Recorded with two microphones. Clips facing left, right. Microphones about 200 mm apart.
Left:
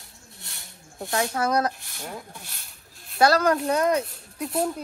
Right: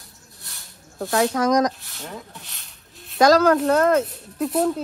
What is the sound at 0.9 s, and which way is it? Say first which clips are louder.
Speech: right 6 dB; 65° right (ahead or behind).